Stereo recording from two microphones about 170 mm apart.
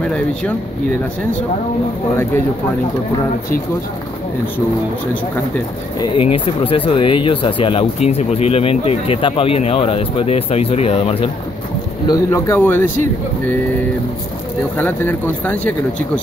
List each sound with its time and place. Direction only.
0.0 s speech: 5° left (ahead or behind)
5.9 s speech: 30° left (ahead or behind)
12.1 s speech: 15° left (ahead or behind)
14.8 s speech: 10° left (ahead or behind)